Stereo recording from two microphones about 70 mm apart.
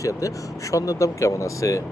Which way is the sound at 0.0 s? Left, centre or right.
Left.